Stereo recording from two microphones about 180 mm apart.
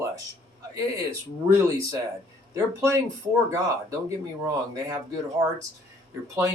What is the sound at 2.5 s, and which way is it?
Speech, 15° right (ahead or behind).